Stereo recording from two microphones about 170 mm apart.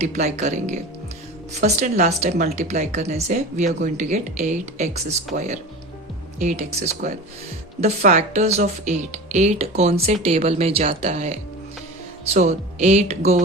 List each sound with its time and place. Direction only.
0.0 s speech: 40° right (ahead or behind)